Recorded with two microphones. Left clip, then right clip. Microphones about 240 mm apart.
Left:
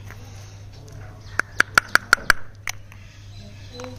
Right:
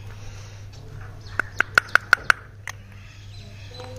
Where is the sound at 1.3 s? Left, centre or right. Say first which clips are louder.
Left 2 dB; left.